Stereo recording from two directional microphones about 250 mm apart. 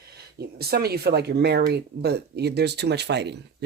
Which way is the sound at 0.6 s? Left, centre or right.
Right.